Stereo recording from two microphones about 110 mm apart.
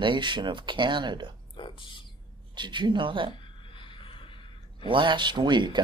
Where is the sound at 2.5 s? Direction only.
45° right (ahead or behind).